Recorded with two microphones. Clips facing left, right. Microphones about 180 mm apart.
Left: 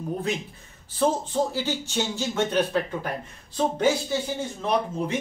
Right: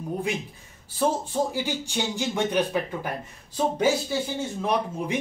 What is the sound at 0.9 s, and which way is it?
Speech, 10° right (ahead or behind).